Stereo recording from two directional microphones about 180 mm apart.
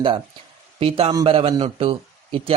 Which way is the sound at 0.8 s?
35° right (ahead or behind).